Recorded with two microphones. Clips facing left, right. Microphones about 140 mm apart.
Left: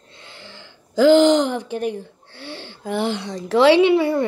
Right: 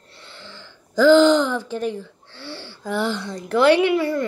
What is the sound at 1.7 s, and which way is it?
Speech, 55° left (ahead or behind).